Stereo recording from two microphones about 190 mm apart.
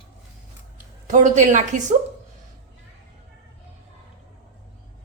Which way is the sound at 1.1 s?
40° right (ahead or behind).